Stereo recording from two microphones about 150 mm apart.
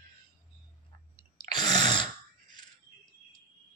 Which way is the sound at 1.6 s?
30° left (ahead or behind).